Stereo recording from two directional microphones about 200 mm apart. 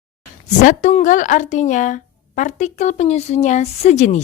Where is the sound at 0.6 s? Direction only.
40° left (ahead or behind).